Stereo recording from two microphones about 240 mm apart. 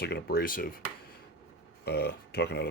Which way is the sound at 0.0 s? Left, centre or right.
Left.